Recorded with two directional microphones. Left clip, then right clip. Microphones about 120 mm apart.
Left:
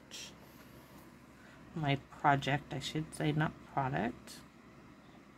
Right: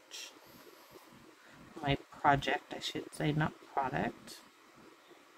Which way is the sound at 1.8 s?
10° left (ahead or behind).